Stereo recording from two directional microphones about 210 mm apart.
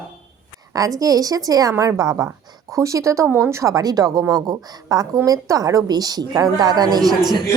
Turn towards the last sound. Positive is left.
turn(degrees=-20)  # may be behind; listen again after turning